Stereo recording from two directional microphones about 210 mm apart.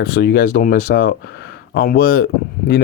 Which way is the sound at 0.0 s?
45° left (ahead or behind).